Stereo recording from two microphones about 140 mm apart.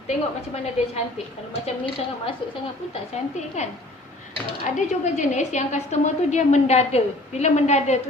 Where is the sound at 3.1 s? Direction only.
55° left (ahead or behind).